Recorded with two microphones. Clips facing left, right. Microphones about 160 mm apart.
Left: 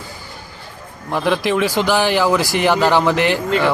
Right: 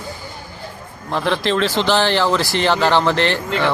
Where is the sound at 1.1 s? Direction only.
15° left (ahead or behind).